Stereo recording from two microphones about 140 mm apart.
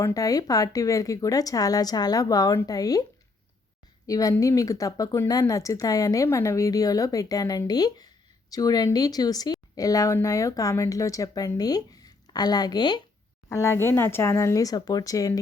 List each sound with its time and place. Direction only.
0.0 s speech: 25° left (ahead or behind)
4.0 s speech: 25° left (ahead or behind)
13.5 s speech: 20° left (ahead or behind)